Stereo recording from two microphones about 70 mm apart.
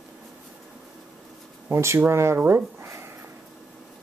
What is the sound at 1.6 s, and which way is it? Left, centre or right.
Speech, right.